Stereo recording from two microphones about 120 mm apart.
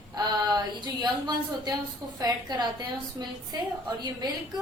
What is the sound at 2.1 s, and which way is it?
A woman's voice, 35° right (ahead or behind).